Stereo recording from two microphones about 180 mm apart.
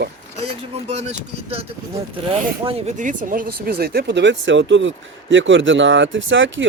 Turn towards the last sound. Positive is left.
turn(degrees=-90)